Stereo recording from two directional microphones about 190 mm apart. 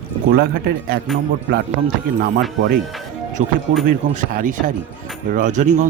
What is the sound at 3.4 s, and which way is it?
A man's voice, 40° right (ahead or behind).